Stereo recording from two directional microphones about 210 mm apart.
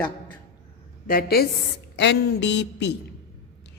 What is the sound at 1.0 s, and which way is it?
A woman's voice, 45° left (ahead or behind).